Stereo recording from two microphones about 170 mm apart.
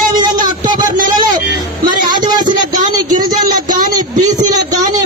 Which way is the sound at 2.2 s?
25° right (ahead or behind).